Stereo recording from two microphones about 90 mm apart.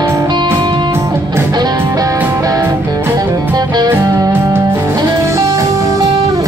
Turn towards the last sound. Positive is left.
turn(degrees=-40)  # may be behind; listen again after turning